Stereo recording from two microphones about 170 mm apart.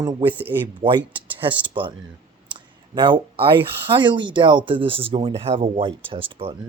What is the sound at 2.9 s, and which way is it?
Speech, 30° right (ahead or behind).